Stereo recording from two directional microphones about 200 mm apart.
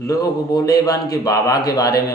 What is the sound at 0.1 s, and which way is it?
Speech, 15° left (ahead or behind).